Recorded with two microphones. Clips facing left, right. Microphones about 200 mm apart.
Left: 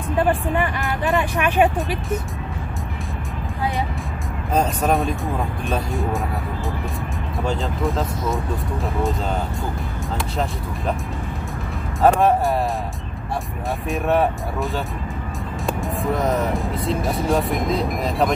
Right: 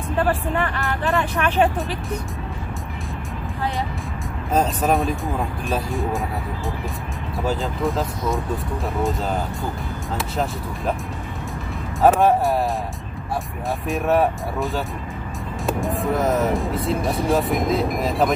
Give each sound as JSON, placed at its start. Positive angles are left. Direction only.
{"t": 0.2, "sound": "speech", "side_deg": 15}
{"t": 4.6, "sound": "speech", "side_deg": 0}
{"t": 7.4, "sound": "speech", "side_deg": 0}
{"t": 12.0, "sound": "speech", "side_deg": 0}
{"t": 13.8, "sound": "speech", "side_deg": 0}